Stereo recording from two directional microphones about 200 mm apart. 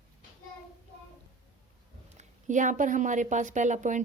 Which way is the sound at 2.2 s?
40° right (ahead or behind).